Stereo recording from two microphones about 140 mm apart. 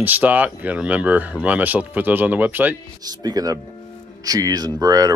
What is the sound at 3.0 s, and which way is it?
Speech, 30° right (ahead or behind).